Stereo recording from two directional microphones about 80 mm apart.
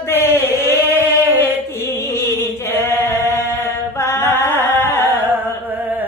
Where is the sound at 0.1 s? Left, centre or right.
Left.